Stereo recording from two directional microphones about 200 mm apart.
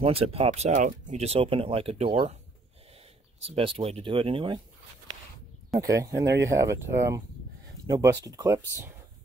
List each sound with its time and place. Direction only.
0.0 s speech: 30° right (ahead or behind)
3.4 s speech: 30° right (ahead or behind)
5.8 s speech: 15° right (ahead or behind)